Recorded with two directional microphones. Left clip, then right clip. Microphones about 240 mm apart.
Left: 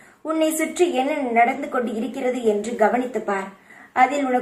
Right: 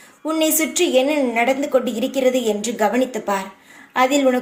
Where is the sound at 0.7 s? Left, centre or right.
Right.